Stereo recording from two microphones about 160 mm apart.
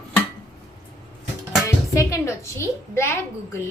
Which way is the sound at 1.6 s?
20° left (ahead or behind).